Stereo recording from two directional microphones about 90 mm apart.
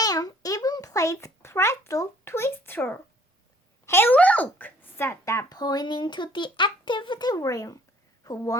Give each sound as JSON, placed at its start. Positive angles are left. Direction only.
{"t": 0.0, "sound": "a sound", "side_deg": 45}
{"t": 3.8, "sound": "speech", "side_deg": 25}
{"t": 5.5, "sound": "speech", "side_deg": 50}